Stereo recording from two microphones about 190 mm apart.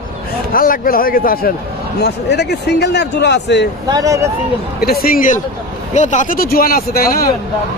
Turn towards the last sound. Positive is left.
turn(degrees=50)  # may be behind; listen again after turning